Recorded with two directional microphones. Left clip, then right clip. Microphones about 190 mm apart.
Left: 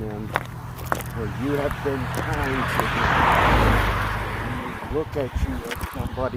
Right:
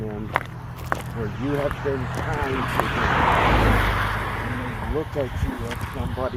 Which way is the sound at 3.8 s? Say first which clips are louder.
Right 1 dB; 35° right (ahead or behind).